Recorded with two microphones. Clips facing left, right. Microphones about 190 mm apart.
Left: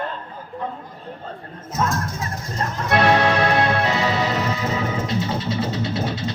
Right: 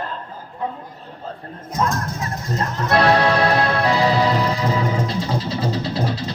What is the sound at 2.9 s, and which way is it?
Music, 35° right (ahead or behind).